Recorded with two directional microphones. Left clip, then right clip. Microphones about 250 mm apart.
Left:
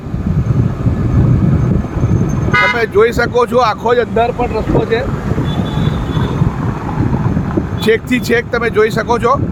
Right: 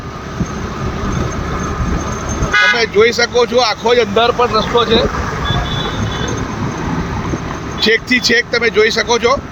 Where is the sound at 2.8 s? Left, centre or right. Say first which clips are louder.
Even; left.